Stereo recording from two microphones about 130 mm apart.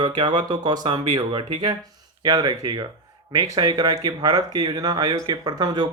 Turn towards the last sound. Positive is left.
turn(degrees=-30)  # may be behind; listen again after turning